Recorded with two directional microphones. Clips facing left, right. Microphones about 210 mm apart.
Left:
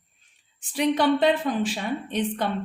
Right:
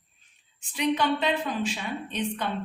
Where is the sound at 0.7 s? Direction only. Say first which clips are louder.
Left 4 dB; 50° left (ahead or behind).